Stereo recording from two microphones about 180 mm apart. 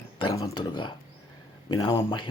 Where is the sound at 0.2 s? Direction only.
25° left (ahead or behind).